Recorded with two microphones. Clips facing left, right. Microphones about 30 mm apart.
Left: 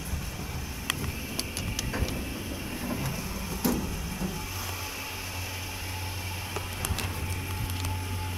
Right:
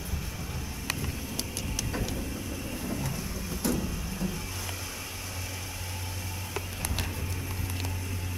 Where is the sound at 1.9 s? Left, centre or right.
Centre.